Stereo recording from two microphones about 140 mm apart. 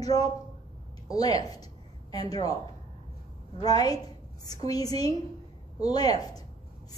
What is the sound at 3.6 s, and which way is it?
Speech, 30° left (ahead or behind).